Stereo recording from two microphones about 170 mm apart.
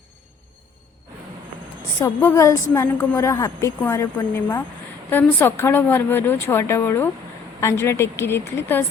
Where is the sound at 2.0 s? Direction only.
15° left (ahead or behind).